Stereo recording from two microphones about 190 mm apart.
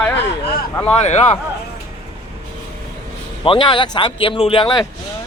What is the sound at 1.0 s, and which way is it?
Speech, 35° left (ahead or behind).